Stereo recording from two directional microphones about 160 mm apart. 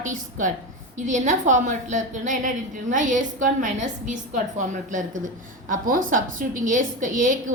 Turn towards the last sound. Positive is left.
turn(degrees=-55)  # may be behind; listen again after turning